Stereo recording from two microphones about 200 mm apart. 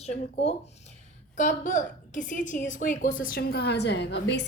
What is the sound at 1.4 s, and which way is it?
A woman's voice, 40° left (ahead or behind).